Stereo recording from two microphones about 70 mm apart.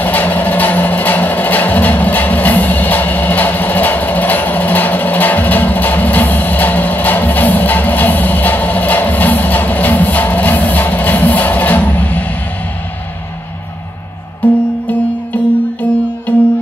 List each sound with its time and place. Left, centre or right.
0.0 s music: left
14.4 s music: left